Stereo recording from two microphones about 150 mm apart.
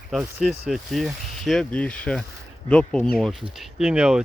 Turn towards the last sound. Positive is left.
turn(degrees=-5)  # may be behind; listen again after turning